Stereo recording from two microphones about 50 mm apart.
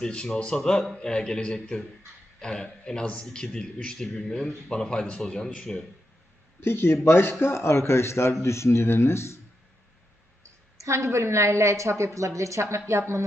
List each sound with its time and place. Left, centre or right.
0.0 s a man's voice: centre
6.6 s a man's voice: left
10.8 s a woman's voice: right
12.9 s speech: right